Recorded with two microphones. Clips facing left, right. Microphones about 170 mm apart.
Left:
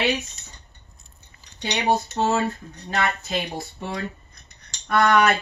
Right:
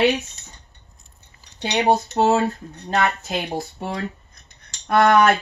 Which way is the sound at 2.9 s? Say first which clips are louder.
Right 3 dB; 60° right (ahead or behind).